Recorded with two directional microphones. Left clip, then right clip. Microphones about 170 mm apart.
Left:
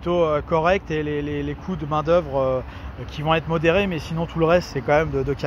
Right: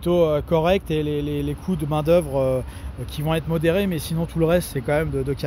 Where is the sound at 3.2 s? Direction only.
35° right (ahead or behind).